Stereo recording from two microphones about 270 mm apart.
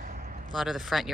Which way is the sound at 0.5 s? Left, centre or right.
Centre.